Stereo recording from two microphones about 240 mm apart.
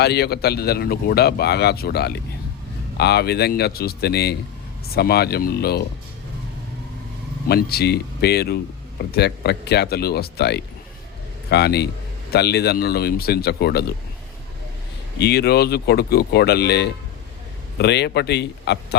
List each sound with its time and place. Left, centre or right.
0.0 s a man's voice: left
7.4 s a man's voice: left
15.2 s speech: left